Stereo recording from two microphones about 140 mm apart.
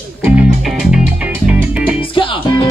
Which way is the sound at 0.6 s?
5° right (ahead or behind).